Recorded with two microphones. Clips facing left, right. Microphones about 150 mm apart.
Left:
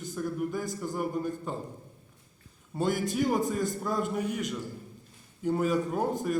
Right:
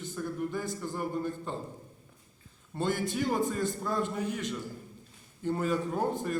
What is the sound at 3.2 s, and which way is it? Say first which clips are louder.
A man's voice: left 2 dB; 15° left (ahead or behind).